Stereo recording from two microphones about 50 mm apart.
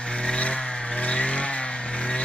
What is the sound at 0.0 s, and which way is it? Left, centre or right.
Vehicle, left.